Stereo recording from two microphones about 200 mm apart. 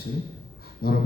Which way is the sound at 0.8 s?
50° left (ahead or behind).